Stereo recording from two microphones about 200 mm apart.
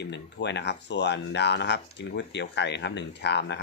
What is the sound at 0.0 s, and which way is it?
Speech, 60° left (ahead or behind).